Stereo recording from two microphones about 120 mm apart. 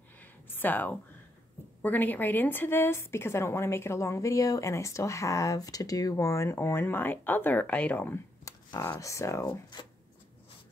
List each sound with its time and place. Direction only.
0.2 s a sound: 15° left (ahead or behind)
1.8 s a woman's voice: 15° left (ahead or behind)
8.5 s speech: 30° left (ahead or behind)
9.5 s speech: 40° left (ahead or behind)